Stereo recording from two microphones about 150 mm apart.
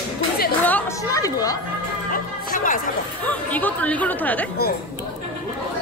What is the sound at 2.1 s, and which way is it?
Music, 65° left (ahead or behind).